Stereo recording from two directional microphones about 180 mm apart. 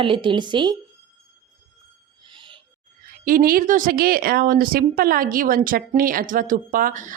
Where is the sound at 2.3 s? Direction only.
25° right (ahead or behind).